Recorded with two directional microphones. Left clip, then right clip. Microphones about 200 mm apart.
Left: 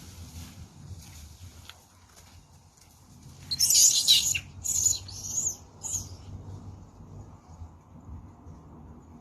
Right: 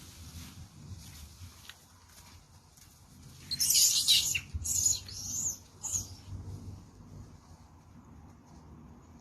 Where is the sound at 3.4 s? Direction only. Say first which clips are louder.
Left 5 dB; 35° left (ahead or behind).